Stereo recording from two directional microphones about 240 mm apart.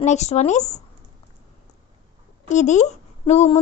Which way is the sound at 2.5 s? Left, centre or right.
Left.